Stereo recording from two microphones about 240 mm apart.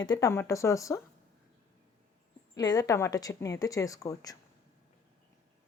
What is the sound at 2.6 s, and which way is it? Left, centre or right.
Speech, centre.